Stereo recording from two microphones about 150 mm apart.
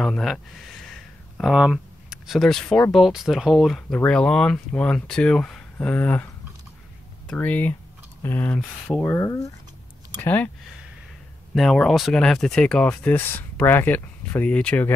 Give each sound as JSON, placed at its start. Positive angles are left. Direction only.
{"t": 0.0, "sound": "speech", "side_deg": 0}
{"t": 1.4, "sound": "speech", "side_deg": -5}
{"t": 7.2, "sound": "speech", "side_deg": 10}
{"t": 8.5, "sound": "speech", "side_deg": 0}
{"t": 9.1, "sound": "speech", "side_deg": 20}
{"t": 10.1, "sound": "speech", "side_deg": 10}
{"t": 11.5, "sound": "speech", "side_deg": 0}